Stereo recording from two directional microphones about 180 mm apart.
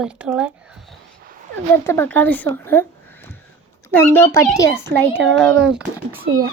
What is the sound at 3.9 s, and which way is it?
A woman's voice, 10° left (ahead or behind).